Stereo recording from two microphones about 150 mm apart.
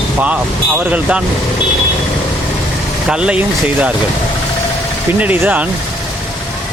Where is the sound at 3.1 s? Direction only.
5° right (ahead or behind).